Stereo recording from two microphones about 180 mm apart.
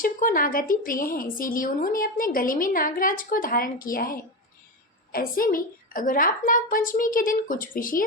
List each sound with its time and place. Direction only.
0.0 s speech: 50° left (ahead or behind)